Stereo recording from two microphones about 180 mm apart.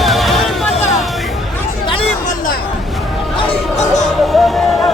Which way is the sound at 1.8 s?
30° left (ahead or behind).